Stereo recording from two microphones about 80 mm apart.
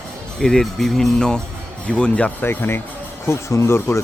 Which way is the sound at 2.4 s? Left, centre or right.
Left.